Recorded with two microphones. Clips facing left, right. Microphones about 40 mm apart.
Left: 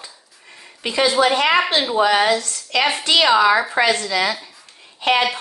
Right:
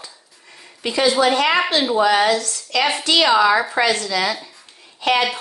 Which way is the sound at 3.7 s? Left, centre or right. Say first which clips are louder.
Left 1 dB; left.